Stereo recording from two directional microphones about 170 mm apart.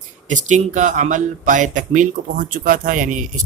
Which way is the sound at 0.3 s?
45° right (ahead or behind).